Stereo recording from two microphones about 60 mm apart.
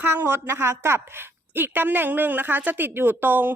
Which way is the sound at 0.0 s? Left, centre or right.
Right.